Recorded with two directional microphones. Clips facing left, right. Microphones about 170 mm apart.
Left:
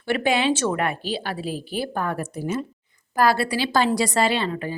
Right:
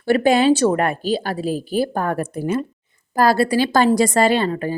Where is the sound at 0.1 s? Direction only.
40° right (ahead or behind).